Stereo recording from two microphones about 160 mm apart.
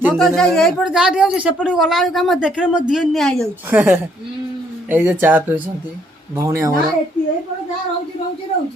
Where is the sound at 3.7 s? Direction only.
15° right (ahead or behind).